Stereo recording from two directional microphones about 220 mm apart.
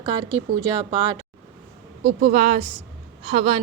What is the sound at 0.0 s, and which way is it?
Speech, 20° right (ahead or behind).